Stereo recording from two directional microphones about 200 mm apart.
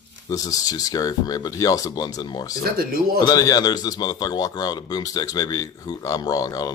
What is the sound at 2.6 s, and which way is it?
Speech, 50° right (ahead or behind).